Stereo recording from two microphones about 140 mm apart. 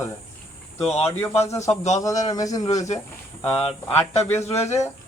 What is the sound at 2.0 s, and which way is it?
Speech, 25° left (ahead or behind).